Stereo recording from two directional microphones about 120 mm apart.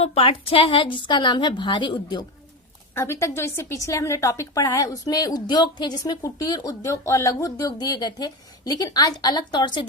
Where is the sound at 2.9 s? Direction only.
20° left (ahead or behind).